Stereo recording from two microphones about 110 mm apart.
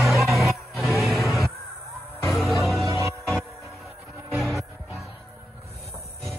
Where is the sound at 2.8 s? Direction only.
25° right (ahead or behind).